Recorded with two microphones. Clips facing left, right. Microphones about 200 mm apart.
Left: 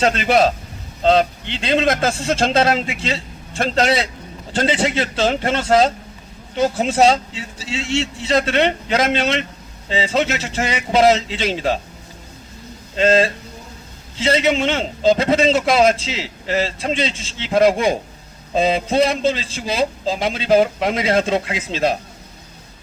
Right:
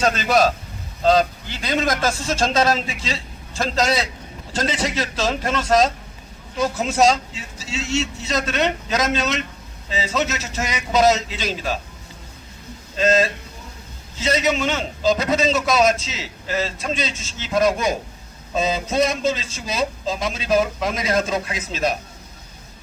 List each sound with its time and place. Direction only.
0.0 s a man's voice: 30° left (ahead or behind)
13.0 s a man's voice: 30° left (ahead or behind)